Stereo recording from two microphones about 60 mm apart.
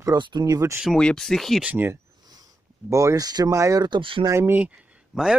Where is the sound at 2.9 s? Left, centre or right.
Right.